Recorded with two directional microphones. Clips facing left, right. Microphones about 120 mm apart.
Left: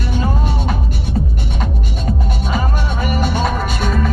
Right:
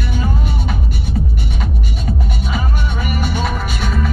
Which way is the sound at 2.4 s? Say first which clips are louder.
Left 4 dB; 45° left (ahead or behind).